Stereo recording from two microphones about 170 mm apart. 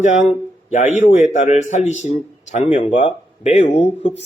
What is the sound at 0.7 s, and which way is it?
A man's voice, 45° left (ahead or behind).